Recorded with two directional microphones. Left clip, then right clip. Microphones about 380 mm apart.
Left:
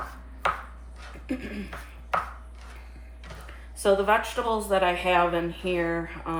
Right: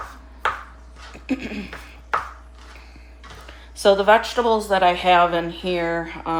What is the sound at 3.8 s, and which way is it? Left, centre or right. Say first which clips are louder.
Speech: right 7 dB; right.